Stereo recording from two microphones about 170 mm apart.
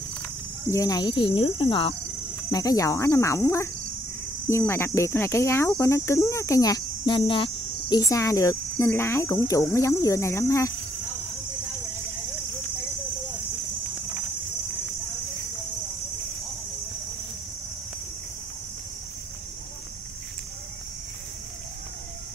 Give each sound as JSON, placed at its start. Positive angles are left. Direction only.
{"t": 0.7, "sound": "speech", "side_deg": 20}
{"t": 2.5, "sound": "speech", "side_deg": 20}
{"t": 4.5, "sound": "cricket", "side_deg": 15}
{"t": 8.0, "sound": "cricket", "side_deg": 20}